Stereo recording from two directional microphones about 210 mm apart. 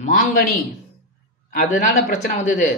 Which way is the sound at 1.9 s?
35° left (ahead or behind).